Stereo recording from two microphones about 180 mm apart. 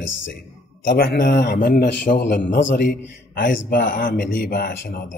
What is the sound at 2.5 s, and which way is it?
Speech, 75° left (ahead or behind).